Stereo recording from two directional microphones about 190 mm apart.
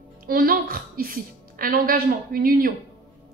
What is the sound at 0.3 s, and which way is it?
A woman's voice, 50° right (ahead or behind).